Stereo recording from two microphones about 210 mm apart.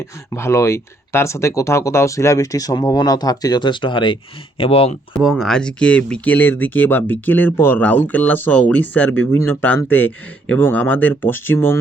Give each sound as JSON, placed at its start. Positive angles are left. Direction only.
{"t": 0.3, "sound": "speech", "side_deg": 15}
{"t": 5.2, "sound": "speech", "side_deg": 0}